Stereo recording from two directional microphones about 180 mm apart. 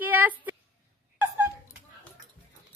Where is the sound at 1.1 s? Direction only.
15° right (ahead or behind).